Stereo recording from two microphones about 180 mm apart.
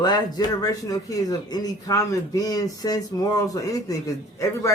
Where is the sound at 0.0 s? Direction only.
25° left (ahead or behind).